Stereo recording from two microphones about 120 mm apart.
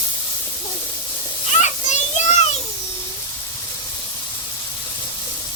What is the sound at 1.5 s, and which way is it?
Children playing, 85° left.